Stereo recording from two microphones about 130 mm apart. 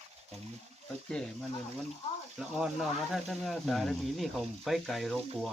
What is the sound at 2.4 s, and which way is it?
Speech, 5° right (ahead or behind).